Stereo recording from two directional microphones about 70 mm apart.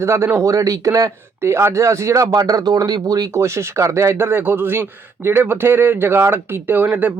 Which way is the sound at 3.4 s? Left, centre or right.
Right.